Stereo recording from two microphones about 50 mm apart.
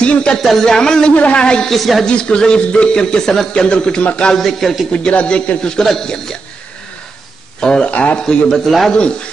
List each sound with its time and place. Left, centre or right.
0.0 s a man's voice: left
0.4 s speech: centre
0.7 s speech: centre
1.1 s a man's voice: left
1.7 s speech: centre
2.0 s speech: centre
4.4 s speech: centre
4.9 s a man's voice: left
5.8 s speech: centre
7.6 s speech: centre
7.9 s a man's voice: left
8.5 s speech: centre